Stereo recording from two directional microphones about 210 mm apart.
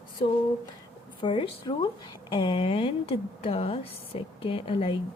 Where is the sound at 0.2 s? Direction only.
20° left (ahead or behind).